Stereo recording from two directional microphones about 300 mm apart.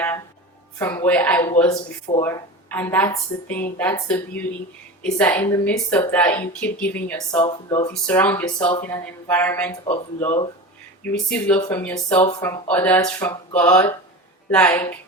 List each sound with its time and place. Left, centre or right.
0.8 s speech: centre
10.2 s speech: left
11.0 s speech: centre